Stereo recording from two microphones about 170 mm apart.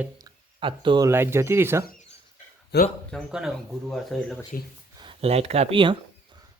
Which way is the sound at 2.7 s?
90° left.